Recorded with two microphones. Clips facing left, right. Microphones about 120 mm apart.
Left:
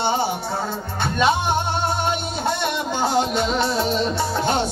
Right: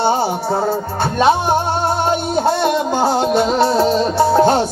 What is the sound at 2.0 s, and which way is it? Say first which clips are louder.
Music: right 7 dB; 35° right (ahead or behind).